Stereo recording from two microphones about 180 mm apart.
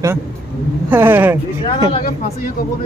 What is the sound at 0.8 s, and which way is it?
Speech, 10° right (ahead or behind).